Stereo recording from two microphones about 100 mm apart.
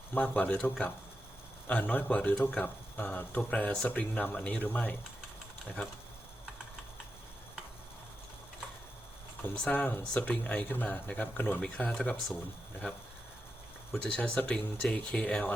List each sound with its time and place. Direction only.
0.1 s speech: 15° left (ahead or behind)
9.4 s speech: 15° left (ahead or behind)
11.9 s speech: 5° left (ahead or behind)
14.0 s speech: 10° left (ahead or behind)